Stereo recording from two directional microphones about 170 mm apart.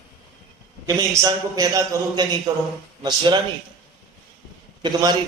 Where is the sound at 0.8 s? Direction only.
20° right (ahead or behind).